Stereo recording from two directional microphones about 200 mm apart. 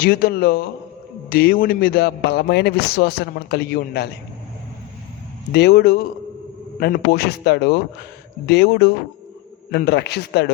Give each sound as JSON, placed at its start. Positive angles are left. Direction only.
{"t": 0.0, "sound": "a man's voice", "side_deg": 50}
{"t": 5.5, "sound": "a man's voice", "side_deg": 55}